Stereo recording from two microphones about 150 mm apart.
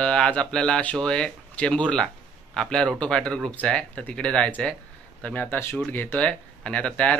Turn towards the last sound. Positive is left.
turn(degrees=5)  # may be behind; listen again after turning